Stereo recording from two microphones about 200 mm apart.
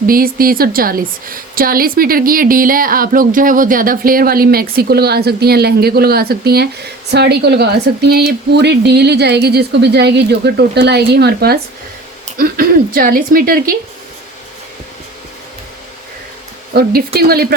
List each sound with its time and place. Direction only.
0.1 s a woman's voice: 45° right (ahead or behind)
16.7 s a woman's voice: 50° right (ahead or behind)